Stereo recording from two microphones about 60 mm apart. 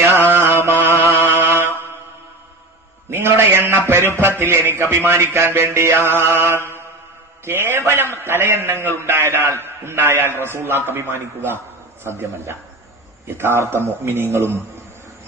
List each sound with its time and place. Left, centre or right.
0.1 s mantra: right
3.1 s a man's voice: right
4.4 s music: right
10.9 s a man's voice: right
13.3 s music: right